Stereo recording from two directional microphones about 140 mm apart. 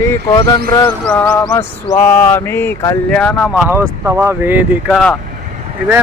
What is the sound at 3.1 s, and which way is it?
Speech, 5° left (ahead or behind).